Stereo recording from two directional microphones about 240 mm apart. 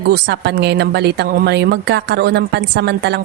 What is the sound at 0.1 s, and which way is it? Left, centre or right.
A woman's voice, right.